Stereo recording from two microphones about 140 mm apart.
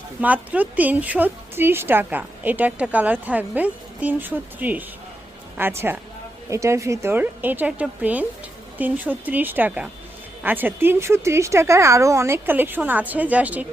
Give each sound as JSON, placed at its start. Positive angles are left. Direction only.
{"t": 0.2, "sound": "a woman's voice", "side_deg": -10}